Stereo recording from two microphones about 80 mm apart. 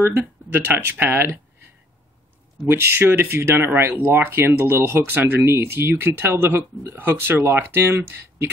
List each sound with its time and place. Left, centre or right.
0.0 s speech: right
2.7 s speech: right